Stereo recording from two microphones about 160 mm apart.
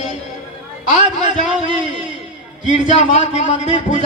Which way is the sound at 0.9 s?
30° right (ahead or behind).